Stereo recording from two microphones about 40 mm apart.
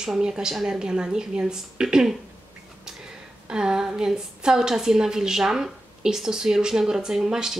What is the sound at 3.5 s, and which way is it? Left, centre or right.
A woman's voice, right.